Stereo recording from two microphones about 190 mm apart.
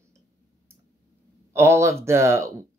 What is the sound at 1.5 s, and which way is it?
Speech, 15° right (ahead or behind).